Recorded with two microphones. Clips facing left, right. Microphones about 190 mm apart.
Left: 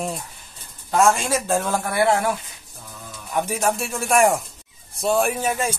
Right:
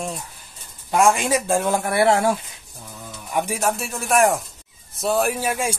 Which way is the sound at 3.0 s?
15° right (ahead or behind).